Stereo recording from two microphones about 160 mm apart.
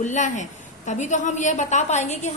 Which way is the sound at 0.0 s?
50° left (ahead or behind).